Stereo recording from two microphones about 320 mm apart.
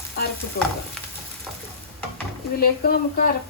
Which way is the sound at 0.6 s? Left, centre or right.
Left.